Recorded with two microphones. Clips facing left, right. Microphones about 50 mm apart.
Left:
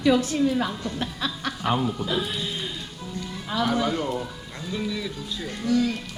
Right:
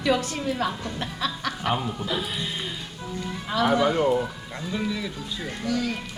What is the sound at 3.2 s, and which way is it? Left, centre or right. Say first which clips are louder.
Speech: right 2 dB; centre.